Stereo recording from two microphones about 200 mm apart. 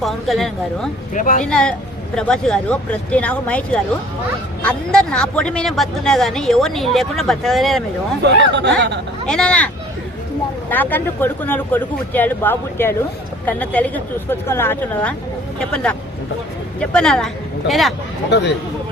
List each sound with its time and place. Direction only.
0.0 s speech: centre (ahead or behind)
1.1 s speech: 40° left (ahead or behind)
1.5 s speech: 5° left (ahead or behind)
8.2 s speech: 55° right (ahead or behind)
9.2 s speech: 5° left (ahead or behind)
10.7 s speech: 10° left (ahead or behind)